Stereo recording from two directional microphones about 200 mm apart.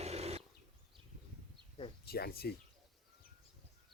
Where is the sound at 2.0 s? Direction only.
50° left (ahead or behind).